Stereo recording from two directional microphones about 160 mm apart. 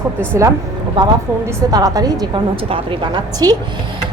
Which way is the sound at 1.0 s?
30° right (ahead or behind).